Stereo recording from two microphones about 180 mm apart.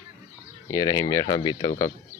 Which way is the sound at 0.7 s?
20° left (ahead or behind).